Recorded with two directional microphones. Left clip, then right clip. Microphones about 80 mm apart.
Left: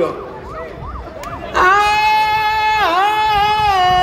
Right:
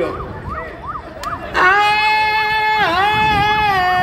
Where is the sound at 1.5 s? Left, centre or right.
Left.